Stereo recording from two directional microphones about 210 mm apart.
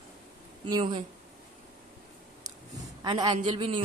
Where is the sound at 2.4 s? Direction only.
20° right (ahead or behind).